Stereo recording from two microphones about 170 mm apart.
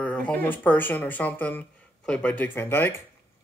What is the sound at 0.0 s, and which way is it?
Speech, 10° left (ahead or behind).